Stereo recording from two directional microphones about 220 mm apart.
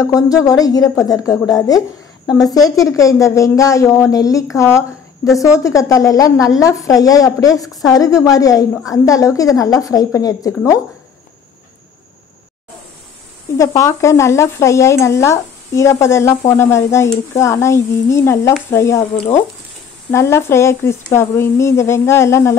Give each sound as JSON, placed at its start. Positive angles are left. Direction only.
{"t": 0.0, "sound": "stir", "side_deg": 15}
{"t": 13.6, "sound": "stir", "side_deg": 15}
{"t": 20.1, "sound": "stir", "side_deg": 10}